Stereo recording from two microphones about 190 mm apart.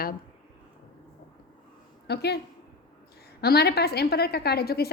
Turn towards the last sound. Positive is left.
turn(degrees=55)  # may be behind; listen again after turning